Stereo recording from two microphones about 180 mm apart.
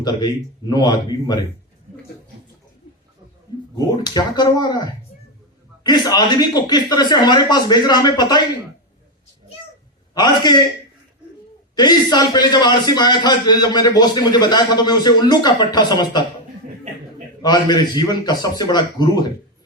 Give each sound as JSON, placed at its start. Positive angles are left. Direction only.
{"t": 0.0, "sound": "a man's voice", "side_deg": 25}
{"t": 3.8, "sound": "a man's voice", "side_deg": 25}
{"t": 10.2, "sound": "a man's voice", "side_deg": 25}
{"t": 11.8, "sound": "a man's voice", "side_deg": 25}
{"t": 17.4, "sound": "a man's voice", "side_deg": 25}